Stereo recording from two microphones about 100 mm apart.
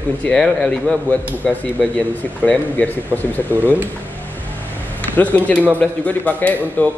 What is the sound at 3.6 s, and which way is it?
Speech, 20° right (ahead or behind).